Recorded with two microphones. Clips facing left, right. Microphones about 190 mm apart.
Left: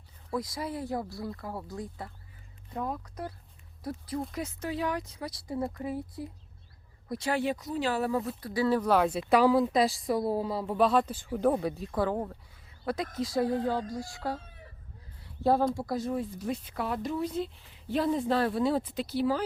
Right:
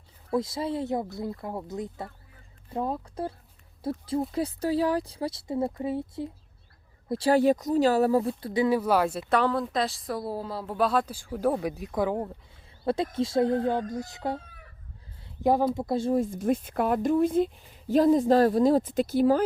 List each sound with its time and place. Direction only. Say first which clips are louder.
0.3 s speech: right 6 dB; 25° right (ahead or behind)
8.8 s a woman's voice: right 1 dB; 5° right (ahead or behind)
12.8 s speech: right 5 dB; 30° right (ahead or behind)
16.1 s speech: right 7 dB; 45° right (ahead or behind)